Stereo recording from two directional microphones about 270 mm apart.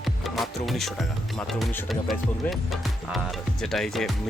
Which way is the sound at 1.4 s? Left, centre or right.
Centre.